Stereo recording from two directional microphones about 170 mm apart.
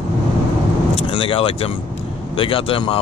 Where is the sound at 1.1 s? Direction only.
30° left (ahead or behind).